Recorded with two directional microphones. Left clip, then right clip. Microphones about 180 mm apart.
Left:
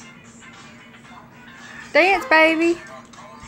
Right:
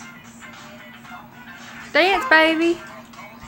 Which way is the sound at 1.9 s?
5° right (ahead or behind).